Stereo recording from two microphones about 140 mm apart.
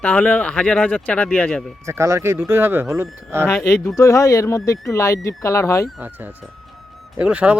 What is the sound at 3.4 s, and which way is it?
Speech, 15° left (ahead or behind).